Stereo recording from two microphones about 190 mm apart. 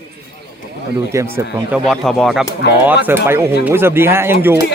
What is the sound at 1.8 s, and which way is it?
Speech, centre (ahead or behind).